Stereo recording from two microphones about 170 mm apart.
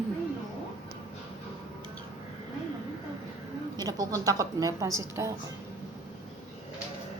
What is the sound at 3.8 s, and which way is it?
A woman's voice, 20° right (ahead or behind).